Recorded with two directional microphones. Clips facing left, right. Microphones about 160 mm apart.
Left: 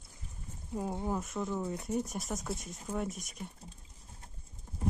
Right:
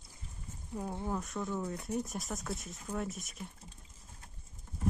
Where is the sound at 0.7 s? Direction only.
10° left (ahead or behind).